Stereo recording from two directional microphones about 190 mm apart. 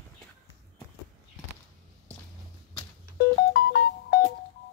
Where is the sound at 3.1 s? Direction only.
55° left (ahead or behind).